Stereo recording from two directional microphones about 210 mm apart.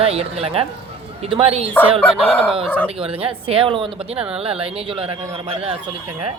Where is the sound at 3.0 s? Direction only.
25° right (ahead or behind).